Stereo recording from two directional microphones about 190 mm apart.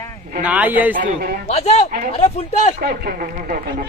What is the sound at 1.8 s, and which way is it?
Speech, 45° right (ahead or behind).